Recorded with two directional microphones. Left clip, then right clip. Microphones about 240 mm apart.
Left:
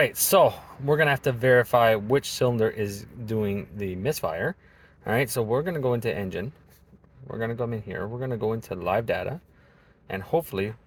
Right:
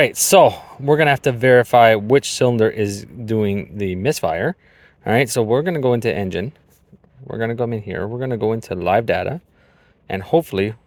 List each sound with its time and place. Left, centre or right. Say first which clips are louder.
0.0 s speech: right 8 dB; right